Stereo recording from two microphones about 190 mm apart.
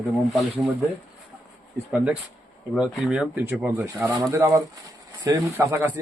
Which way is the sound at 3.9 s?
20° right (ahead or behind).